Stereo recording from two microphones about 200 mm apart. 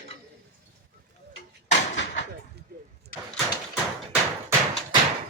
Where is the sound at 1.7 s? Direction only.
60° left (ahead or behind).